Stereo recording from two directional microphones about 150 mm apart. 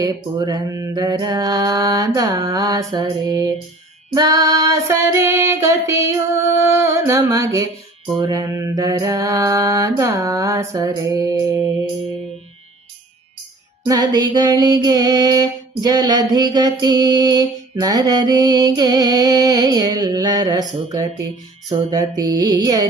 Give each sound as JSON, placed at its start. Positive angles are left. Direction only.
{"t": 0.0, "sound": "mantra", "side_deg": -25}
{"t": 13.8, "sound": "mantra", "side_deg": -25}